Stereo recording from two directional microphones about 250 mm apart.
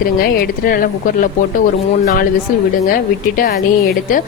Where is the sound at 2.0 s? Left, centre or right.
Left.